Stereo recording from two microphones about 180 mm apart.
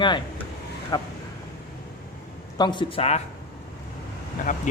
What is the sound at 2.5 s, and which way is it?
Speech, 25° left (ahead or behind).